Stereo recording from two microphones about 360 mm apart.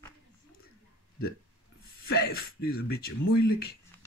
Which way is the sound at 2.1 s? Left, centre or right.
Left.